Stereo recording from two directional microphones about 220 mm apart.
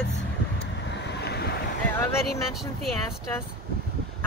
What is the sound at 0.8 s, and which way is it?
Waves, 50° left (ahead or behind).